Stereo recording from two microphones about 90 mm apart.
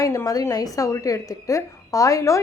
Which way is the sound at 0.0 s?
35° left (ahead or behind).